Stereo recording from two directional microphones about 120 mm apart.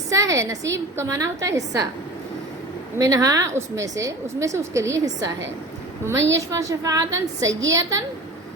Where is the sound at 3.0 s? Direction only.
30° right (ahead or behind).